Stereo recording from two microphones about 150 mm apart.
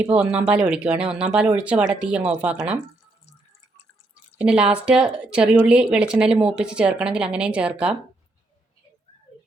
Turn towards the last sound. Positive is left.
turn(degrees=-5)  # may be behind; listen again after turning